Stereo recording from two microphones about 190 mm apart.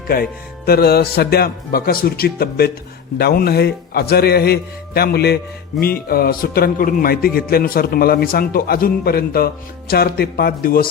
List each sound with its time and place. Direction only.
0.1 s a man's voice: 55° left (ahead or behind)